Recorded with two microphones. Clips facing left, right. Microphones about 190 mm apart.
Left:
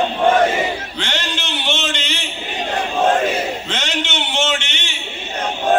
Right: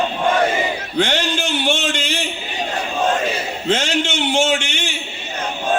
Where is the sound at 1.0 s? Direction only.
55° right (ahead or behind).